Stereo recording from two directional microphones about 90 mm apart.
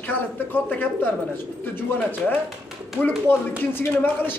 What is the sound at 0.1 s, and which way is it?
A man's voice, 20° left (ahead or behind).